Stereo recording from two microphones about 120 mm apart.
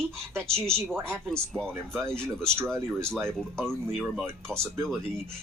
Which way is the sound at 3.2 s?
5° left (ahead or behind).